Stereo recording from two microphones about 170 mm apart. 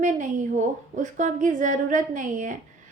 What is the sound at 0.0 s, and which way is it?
Speech, 50° right (ahead or behind).